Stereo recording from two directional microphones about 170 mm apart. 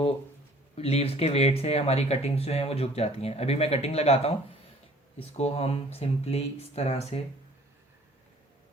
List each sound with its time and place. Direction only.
0.8 s speech: 35° left (ahead or behind)